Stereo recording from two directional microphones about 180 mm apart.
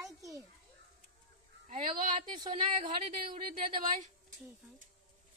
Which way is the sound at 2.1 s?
25° right (ahead or behind).